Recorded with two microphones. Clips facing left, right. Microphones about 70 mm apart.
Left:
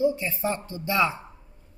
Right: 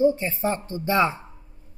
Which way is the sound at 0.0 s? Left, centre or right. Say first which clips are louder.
Right 4 dB; right.